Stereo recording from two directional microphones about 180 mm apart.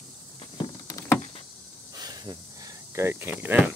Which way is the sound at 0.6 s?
15° left (ahead or behind).